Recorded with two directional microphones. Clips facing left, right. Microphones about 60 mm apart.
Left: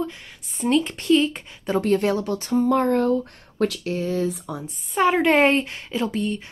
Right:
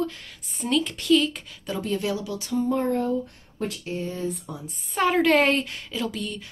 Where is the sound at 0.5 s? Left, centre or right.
Left.